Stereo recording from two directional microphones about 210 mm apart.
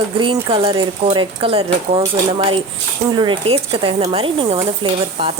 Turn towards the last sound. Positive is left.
turn(degrees=-25)  # may be behind; listen again after turning